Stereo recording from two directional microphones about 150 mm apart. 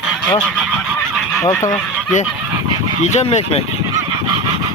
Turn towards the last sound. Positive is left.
turn(degrees=50)  # may be behind; listen again after turning